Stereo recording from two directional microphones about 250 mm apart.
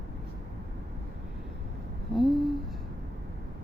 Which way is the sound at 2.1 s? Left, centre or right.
Centre.